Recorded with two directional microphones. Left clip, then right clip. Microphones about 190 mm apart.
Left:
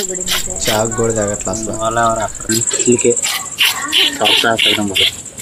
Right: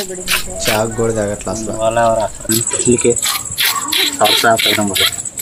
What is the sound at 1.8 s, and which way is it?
Speech, 20° right (ahead or behind).